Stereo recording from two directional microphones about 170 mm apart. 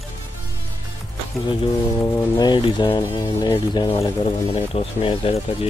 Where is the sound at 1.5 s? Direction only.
20° left (ahead or behind).